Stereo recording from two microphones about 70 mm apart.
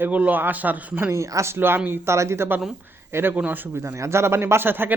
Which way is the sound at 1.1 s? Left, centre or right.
Right.